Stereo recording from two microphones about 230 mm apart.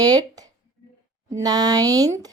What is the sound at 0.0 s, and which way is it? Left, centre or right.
A woman's voice, centre.